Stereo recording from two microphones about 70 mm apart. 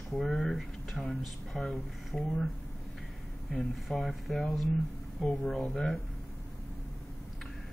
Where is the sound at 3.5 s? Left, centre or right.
Centre.